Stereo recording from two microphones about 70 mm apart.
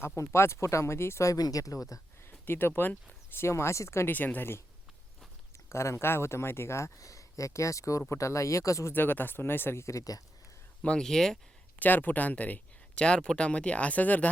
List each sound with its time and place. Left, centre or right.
0.2 s speech: left
2.5 s speech: left
3.4 s speech: left
4.1 s speech: left
5.6 s speech: left
8.9 s speech: left
10.8 s speech: centre
11.8 s speech: left